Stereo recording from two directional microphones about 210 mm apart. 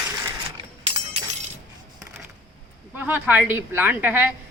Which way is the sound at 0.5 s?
30° right (ahead or behind).